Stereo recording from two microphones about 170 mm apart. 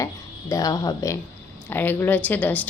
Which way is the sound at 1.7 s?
10° left (ahead or behind).